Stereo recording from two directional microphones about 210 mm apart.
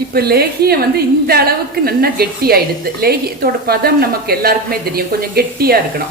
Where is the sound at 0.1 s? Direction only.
50° right (ahead or behind).